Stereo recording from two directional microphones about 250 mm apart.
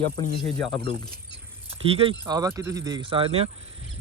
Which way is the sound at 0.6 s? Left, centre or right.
Centre.